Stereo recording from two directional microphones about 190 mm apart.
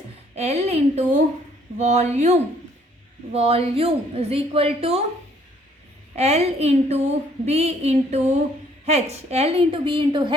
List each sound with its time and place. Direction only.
0.3 s speech: 35° right (ahead or behind)
6.1 s a woman's voice: 35° right (ahead or behind)